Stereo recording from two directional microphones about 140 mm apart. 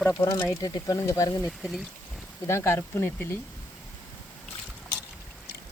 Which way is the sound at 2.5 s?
20° left (ahead or behind).